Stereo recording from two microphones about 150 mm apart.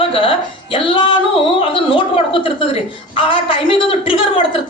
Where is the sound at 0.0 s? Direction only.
40° left (ahead or behind).